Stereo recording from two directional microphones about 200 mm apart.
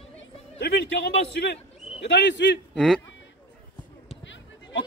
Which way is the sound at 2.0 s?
60° left (ahead or behind).